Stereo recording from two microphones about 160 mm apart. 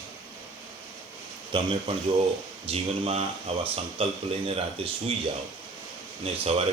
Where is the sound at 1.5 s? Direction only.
35° right (ahead or behind).